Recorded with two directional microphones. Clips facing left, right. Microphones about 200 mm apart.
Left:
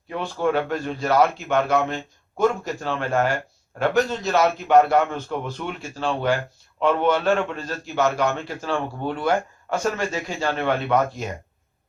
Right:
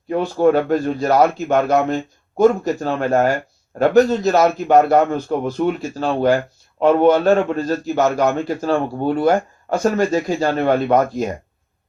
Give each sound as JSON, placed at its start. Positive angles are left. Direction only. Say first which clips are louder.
{"t": 0.1, "sound": "a man's voice", "louder": "right 8 dB", "side_deg": -40}